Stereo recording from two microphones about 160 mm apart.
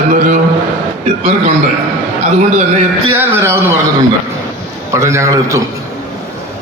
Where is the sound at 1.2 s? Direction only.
40° right (ahead or behind).